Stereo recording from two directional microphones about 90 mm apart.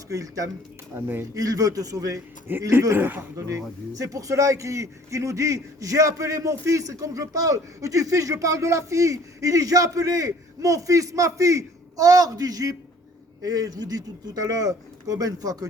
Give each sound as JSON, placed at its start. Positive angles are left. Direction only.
{"t": 0.1, "sound": "a man's voice", "side_deg": -40}
{"t": 0.9, "sound": "speech", "side_deg": -25}
{"t": 1.3, "sound": "a man's voice", "side_deg": -40}
{"t": 2.5, "sound": "speech", "side_deg": -25}
{"t": 3.9, "sound": "a man's voice", "side_deg": -40}